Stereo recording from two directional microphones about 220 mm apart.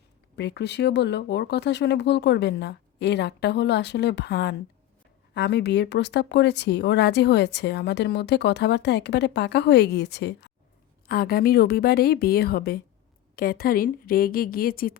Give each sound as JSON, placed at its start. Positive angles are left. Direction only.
{"t": 0.3, "sound": "speech", "side_deg": 50}